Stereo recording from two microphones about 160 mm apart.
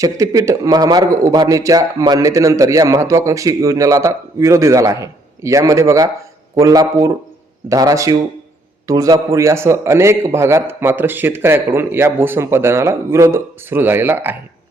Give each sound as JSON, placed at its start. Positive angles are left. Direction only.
{"t": 0.0, "sound": "a man's voice", "side_deg": -20}